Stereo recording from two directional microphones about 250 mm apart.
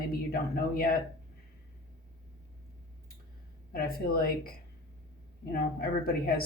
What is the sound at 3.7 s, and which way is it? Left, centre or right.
Speech, left.